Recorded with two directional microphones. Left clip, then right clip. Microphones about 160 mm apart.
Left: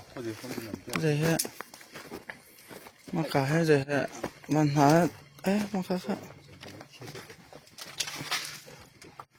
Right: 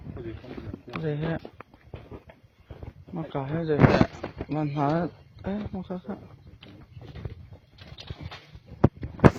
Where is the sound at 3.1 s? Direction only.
80° left; by 6.2 s 60° left (ahead or behind).